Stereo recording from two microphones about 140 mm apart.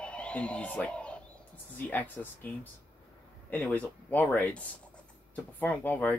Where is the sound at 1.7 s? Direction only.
10° left (ahead or behind).